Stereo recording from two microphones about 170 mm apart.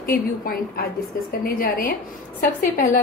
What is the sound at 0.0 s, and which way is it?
A woman's voice, 60° left (ahead or behind).